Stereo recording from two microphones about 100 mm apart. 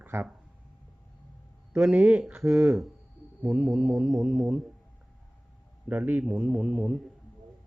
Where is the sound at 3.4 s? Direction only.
15° right (ahead or behind).